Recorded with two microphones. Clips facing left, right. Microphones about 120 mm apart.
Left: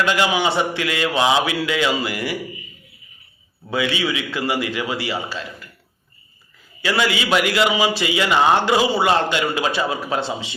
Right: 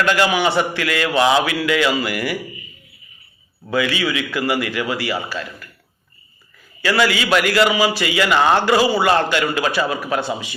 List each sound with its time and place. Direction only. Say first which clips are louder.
0.0 s mantra: right 2 dB; 15° left (ahead or behind)
3.7 s mantra: right 2 dB; 25° left (ahead or behind)
6.8 s mantra: right 2 dB; 20° left (ahead or behind)